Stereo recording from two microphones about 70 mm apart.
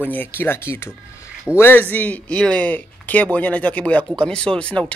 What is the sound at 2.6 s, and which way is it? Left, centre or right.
A man's voice, left.